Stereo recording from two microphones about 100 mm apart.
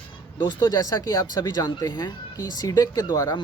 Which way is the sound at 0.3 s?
40° left (ahead or behind).